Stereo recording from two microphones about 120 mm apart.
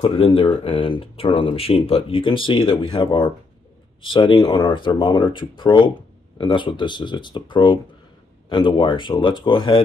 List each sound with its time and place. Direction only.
0.0 s speech: 50° left (ahead or behind)